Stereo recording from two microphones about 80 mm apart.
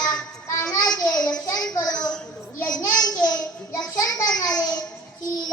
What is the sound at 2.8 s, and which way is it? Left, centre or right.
A child's voice, left.